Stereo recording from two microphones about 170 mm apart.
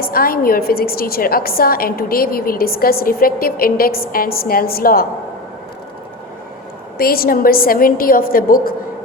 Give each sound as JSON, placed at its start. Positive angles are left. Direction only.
{"t": 0.0, "sound": "a woman's voice", "side_deg": 60}
{"t": 7.0, "sound": "a woman's voice", "side_deg": 60}